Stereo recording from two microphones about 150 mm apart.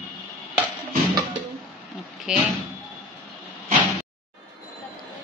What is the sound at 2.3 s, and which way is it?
Speech, 5° right (ahead or behind).